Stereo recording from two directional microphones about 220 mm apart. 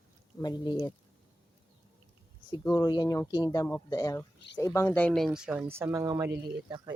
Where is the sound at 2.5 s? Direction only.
20° left (ahead or behind).